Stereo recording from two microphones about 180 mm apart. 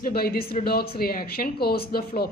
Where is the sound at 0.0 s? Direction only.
55° left (ahead or behind).